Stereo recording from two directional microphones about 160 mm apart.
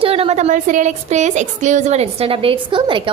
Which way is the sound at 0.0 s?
40° right (ahead or behind).